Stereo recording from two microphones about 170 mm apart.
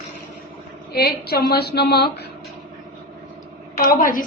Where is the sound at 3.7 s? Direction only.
55° left (ahead or behind).